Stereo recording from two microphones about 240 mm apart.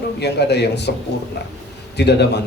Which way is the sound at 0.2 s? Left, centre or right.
Left.